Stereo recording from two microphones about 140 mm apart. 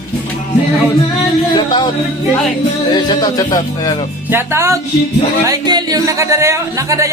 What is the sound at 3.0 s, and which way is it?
Speech, 30° left (ahead or behind).